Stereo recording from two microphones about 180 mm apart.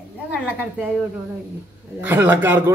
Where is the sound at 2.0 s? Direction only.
10° right (ahead or behind).